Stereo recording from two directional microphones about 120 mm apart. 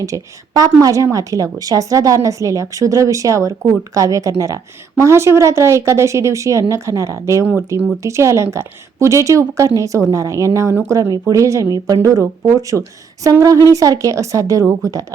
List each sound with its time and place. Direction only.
0.0 s a woman's voice: 30° right (ahead or behind)